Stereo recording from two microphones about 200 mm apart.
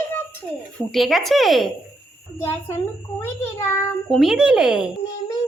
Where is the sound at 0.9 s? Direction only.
Centre (ahead or behind).